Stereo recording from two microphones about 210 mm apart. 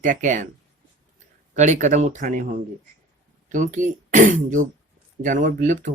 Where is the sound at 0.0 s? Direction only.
35° right (ahead or behind).